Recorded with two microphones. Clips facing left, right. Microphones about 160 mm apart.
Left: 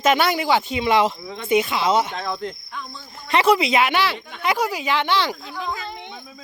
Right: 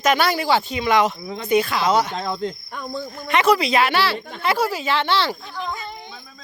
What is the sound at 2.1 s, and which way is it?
Cricket, 25° right (ahead or behind).